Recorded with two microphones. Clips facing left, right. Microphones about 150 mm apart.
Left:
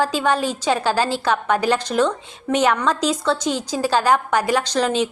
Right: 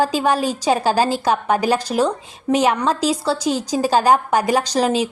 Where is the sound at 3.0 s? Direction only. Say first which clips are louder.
Right 1 dB; 35° right (ahead or behind).